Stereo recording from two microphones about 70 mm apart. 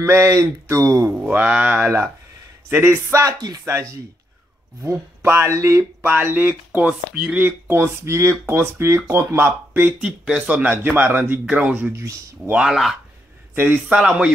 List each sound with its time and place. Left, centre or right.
0.0 s speech: right
1.1 s speech: right
3.1 s speech: right
3.3 s speech: right
3.6 s speech: right
6.0 s speech: right
7.6 s speech: right
9.4 s speech: right
9.9 s speech: centre
10.7 s speech: right
12.6 s speech: centre
13.6 s speech: right
13.9 s speech: centre